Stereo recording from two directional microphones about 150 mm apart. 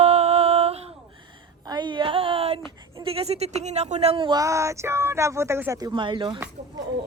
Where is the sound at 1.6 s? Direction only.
30° right (ahead or behind).